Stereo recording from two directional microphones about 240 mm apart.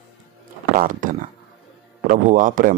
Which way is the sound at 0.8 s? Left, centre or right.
Right.